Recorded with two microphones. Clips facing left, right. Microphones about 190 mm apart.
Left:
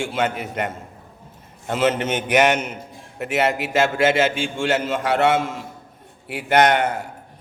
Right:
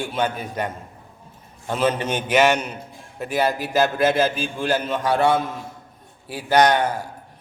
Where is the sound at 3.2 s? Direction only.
75° left (ahead or behind).